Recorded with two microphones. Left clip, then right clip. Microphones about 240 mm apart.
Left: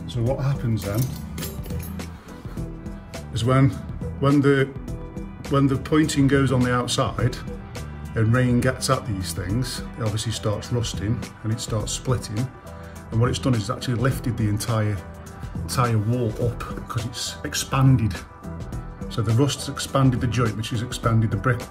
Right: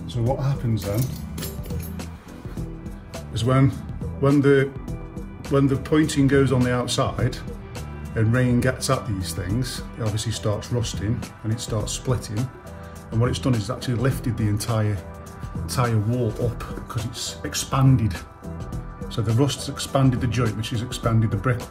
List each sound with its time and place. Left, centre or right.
0.1 s speech: centre
3.3 s speech: centre